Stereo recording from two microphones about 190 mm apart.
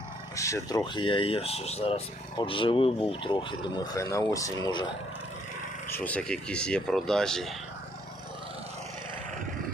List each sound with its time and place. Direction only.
0.3 s speech: 15° left (ahead or behind)
0.9 s speech: 25° left (ahead or behind)
5.9 s speech: 10° left (ahead or behind)